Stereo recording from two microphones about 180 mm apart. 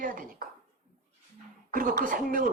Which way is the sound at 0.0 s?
50° right (ahead or behind).